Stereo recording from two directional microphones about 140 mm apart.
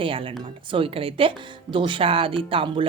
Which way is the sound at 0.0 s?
40° right (ahead or behind).